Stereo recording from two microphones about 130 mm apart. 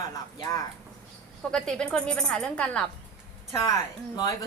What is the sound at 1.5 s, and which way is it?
Speech, 5° left (ahead or behind).